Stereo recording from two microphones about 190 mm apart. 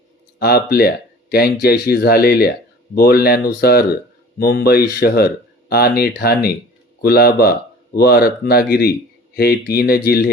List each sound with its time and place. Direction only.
0.3 s speech: 55° left (ahead or behind)